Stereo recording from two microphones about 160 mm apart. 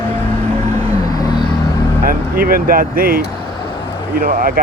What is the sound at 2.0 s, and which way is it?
Speech, 65° right (ahead or behind).